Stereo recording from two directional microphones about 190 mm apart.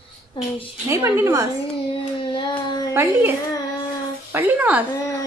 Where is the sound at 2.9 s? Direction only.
10° right (ahead or behind).